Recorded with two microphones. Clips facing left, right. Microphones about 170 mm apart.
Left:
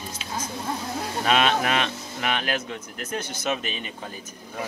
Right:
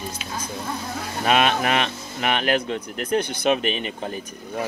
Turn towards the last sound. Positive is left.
turn(degrees=-65)  # may be behind; listen again after turning